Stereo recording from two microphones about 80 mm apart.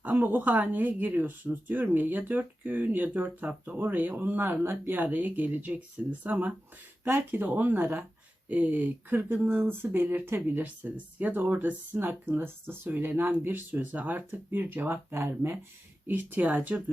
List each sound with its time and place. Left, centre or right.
0.0 s speech: right